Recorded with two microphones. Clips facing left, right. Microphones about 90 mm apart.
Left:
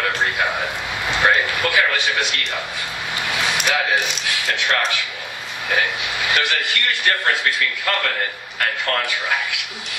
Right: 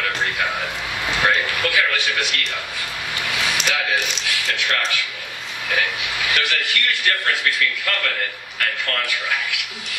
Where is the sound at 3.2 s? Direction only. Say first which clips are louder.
Left 2 dB; 25° left (ahead or behind).